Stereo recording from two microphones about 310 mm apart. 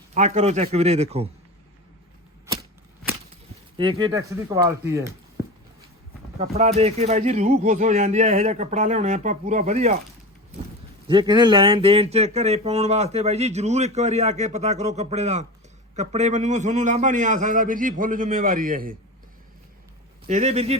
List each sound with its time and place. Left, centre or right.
0.1 s speech: right
3.8 s speech: centre
6.4 s speech: right
11.1 s speech: centre
20.2 s speech: right